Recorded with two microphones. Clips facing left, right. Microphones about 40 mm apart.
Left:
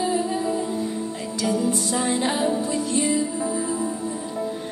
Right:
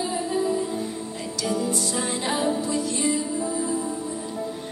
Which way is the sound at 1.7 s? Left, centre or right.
Left.